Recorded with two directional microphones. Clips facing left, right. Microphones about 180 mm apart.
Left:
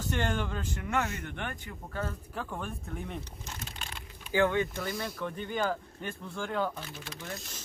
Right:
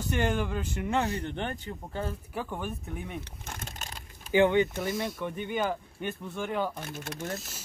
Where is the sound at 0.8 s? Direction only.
35° right (ahead or behind).